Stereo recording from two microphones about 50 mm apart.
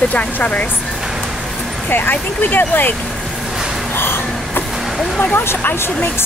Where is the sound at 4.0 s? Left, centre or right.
Left.